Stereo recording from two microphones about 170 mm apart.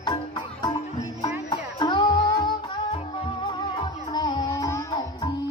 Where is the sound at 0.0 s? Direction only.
25° left (ahead or behind).